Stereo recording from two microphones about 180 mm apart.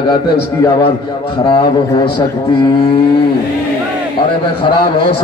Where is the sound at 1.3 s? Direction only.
25° left (ahead or behind).